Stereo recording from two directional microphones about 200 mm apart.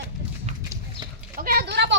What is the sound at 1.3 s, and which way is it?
Speech, 50° right (ahead or behind).